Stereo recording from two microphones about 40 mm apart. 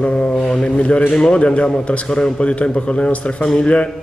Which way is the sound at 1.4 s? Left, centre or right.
Left.